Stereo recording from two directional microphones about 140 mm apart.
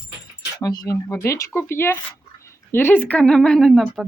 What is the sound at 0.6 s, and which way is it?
Speech, 25° left (ahead or behind).